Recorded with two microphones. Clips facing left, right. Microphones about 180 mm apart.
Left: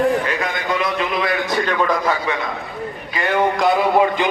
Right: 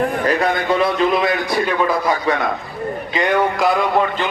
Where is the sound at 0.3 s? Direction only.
35° right (ahead or behind).